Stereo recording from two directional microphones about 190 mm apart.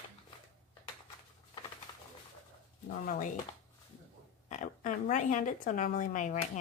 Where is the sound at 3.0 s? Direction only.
45° left (ahead or behind).